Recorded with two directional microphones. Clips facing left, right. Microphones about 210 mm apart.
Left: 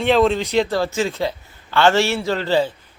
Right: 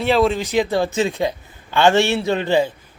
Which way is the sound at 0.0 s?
5° right (ahead or behind).